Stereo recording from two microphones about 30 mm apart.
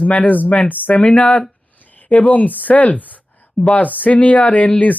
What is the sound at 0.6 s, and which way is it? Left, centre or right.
Speech, left.